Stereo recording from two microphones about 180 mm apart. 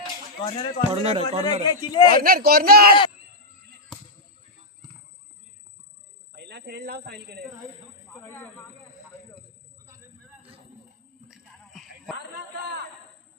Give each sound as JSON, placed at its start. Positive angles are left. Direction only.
{"t": 0.5, "sound": "a man's voice", "side_deg": 30}
{"t": 0.9, "sound": "speech", "side_deg": -35}
{"t": 1.6, "sound": "a man's voice", "side_deg": 25}
{"t": 2.1, "sound": "speech", "side_deg": -55}
{"t": 6.3, "sound": "speech", "side_deg": -65}
{"t": 8.3, "sound": "speech", "side_deg": 10}
{"t": 11.3, "sound": "a sound", "side_deg": 0}
{"t": 12.5, "sound": "a sound", "side_deg": -70}